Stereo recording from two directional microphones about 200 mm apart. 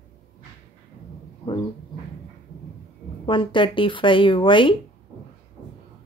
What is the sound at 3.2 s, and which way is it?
Speech, 25° left (ahead or behind).